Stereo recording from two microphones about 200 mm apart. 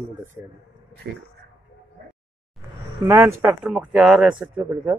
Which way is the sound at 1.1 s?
55° right (ahead or behind).